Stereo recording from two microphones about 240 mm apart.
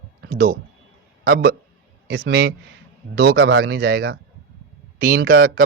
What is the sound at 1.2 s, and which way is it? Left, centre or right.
Speech, right.